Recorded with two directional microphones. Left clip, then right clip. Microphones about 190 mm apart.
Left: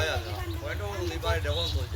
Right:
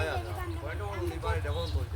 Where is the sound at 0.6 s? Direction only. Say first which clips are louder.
Left 4 dB; 60° right (ahead or behind).